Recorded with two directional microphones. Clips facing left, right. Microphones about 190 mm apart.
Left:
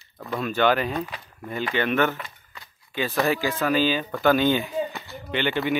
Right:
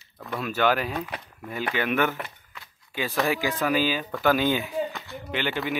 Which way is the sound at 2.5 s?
5° right (ahead or behind).